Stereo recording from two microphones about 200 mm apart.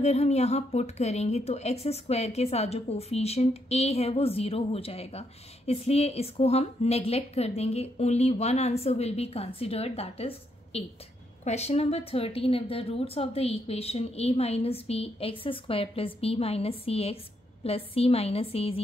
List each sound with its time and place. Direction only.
0.0 s a woman's voice: 35° left (ahead or behind)